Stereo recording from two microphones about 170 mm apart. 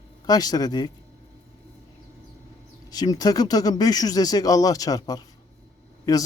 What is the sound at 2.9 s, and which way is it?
Speech, 25° left (ahead or behind).